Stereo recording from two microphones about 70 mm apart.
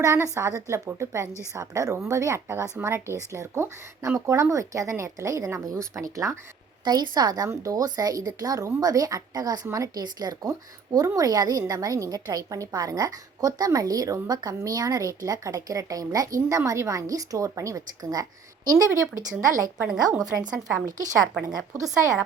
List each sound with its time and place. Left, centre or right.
0.0 s speech: right
6.8 s a woman's voice: right
10.9 s a woman's voice: right
11.7 s a woman's voice: right
21.7 s speech: right